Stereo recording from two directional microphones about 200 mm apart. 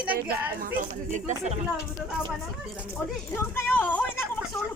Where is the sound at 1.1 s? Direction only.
35° right (ahead or behind).